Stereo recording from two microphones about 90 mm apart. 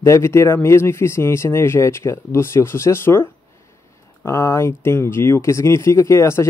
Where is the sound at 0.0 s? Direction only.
30° left (ahead or behind).